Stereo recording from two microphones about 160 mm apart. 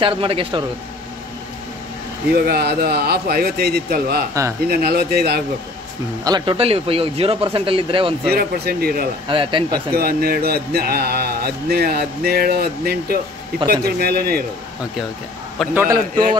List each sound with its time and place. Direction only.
0.0 s speech: 35° right (ahead or behind)
2.3 s speech: 75° right (ahead or behind)
6.2 s speech: 30° right (ahead or behind)
8.3 s speech: 70° right (ahead or behind)
9.3 s speech: 30° right (ahead or behind)
9.9 s speech: 70° right (ahead or behind)
15.7 s a man's voice: 15° right (ahead or behind)